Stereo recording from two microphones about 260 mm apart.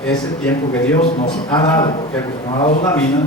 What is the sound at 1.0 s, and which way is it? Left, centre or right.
A man's voice, left.